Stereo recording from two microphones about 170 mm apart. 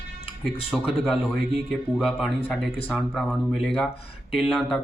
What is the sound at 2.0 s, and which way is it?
Speech, centre (ahead or behind).